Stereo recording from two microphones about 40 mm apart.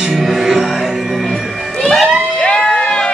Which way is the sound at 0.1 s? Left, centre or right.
Centre.